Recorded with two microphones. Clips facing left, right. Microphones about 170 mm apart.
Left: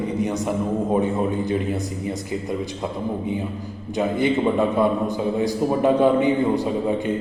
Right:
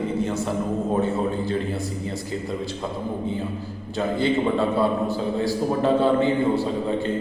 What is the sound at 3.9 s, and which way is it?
A man's voice, 15° left (ahead or behind).